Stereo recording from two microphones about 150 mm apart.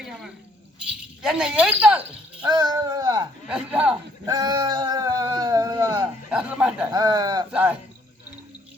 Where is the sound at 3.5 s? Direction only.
5° right (ahead or behind).